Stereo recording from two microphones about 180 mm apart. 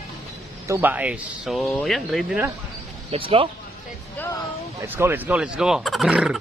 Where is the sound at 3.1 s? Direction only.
30° right (ahead or behind).